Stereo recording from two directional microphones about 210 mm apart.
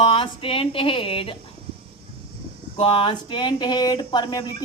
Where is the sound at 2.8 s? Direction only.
25° left (ahead or behind).